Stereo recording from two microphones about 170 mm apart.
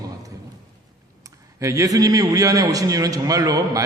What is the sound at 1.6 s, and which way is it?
A man's voice, 20° right (ahead or behind).